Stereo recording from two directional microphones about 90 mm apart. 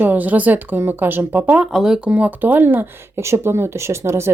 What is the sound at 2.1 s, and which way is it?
Speech, 20° right (ahead or behind).